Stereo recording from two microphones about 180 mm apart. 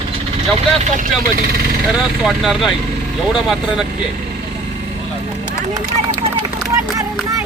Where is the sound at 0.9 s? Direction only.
50° right (ahead or behind).